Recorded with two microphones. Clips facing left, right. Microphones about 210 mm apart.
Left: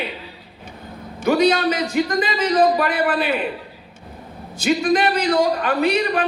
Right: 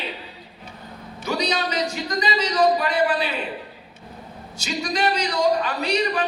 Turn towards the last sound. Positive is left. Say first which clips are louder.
# left 4 dB
turn(degrees=55)  # may be behind; listen again after turning